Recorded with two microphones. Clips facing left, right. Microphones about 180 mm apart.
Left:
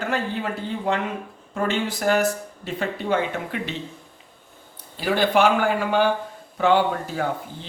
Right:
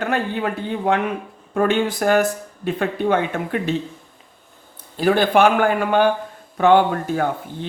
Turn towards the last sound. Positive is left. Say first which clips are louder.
# right 4 dB
turn(degrees=-55)  # may be behind; listen again after turning